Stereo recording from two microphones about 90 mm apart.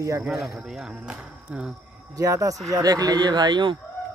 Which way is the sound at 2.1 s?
40° right (ahead or behind).